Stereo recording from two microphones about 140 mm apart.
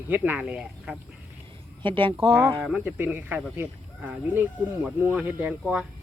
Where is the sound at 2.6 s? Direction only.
10° right (ahead or behind).